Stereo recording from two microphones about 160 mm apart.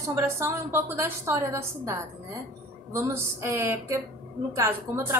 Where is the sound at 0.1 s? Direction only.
15° right (ahead or behind).